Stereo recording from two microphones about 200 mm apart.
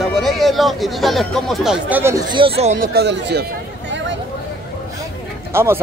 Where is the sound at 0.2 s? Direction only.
Centre (ahead or behind); by 2.9 s 35° right (ahead or behind).